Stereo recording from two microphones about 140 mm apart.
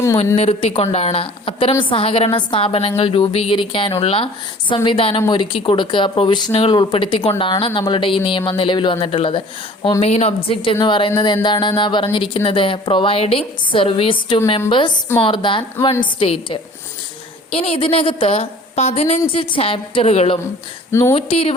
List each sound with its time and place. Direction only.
0.3 s a woman's voice: 45° left (ahead or behind)
20.9 s speech: 20° left (ahead or behind)
21.2 s a woman's voice: 40° left (ahead or behind)